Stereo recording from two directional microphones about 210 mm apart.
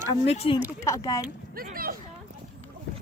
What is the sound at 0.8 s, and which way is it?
Speech, 15° left (ahead or behind).